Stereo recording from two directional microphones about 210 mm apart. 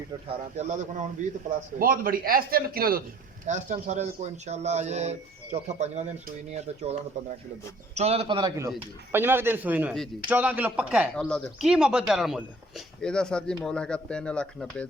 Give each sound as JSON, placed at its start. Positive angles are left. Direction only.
{"t": 0.5, "sound": "a man's voice", "side_deg": -35}
{"t": 9.9, "sound": "speech", "side_deg": 0}
{"t": 11.2, "sound": "speech", "side_deg": 5}